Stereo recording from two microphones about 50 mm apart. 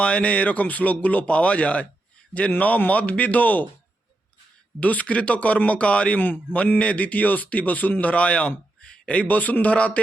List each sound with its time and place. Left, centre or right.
0.0 s speech: left
4.8 s speech: left
6.1 s speech: left